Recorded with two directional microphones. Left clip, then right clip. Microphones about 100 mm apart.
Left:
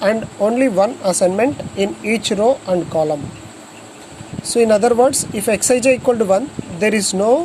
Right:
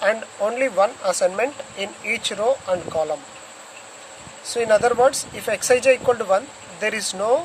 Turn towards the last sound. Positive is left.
turn(degrees=30)  # may be behind; listen again after turning